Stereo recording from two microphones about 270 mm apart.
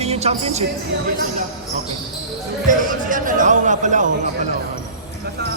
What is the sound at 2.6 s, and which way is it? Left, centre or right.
Speech, right.